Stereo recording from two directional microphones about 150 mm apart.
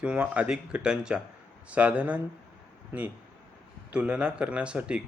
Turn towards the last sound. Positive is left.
turn(degrees=-5)  # may be behind; listen again after turning